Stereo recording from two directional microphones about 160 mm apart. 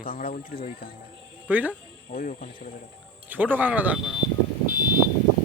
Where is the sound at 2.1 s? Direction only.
55° left (ahead or behind).